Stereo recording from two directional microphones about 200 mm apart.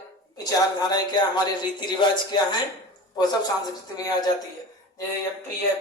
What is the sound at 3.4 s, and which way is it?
Speech, 20° left (ahead or behind).